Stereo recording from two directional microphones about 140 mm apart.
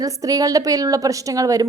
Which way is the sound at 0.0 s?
25° right (ahead or behind).